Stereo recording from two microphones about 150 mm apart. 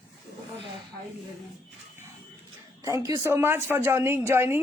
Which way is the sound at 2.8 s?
20° right (ahead or behind).